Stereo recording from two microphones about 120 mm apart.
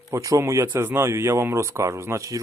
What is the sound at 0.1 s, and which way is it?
Speech, 25° right (ahead or behind).